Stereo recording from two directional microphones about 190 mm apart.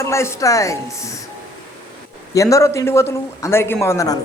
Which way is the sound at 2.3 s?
15° left (ahead or behind).